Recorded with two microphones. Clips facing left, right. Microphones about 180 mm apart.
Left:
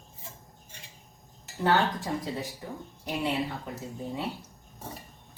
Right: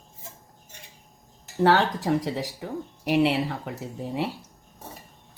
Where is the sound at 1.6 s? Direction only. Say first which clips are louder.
Right 5 dB; 75° right (ahead or behind).